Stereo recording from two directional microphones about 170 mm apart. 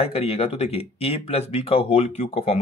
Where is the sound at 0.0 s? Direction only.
35° left (ahead or behind).